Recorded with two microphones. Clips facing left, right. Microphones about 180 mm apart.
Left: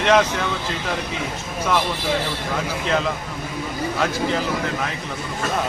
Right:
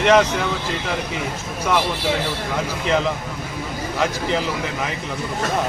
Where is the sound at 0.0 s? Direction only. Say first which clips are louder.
Right 2 dB; 15° right (ahead or behind).